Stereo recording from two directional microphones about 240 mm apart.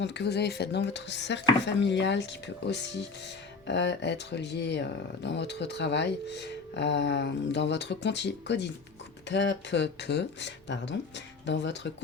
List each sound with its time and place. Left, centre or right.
0.0 s speech: left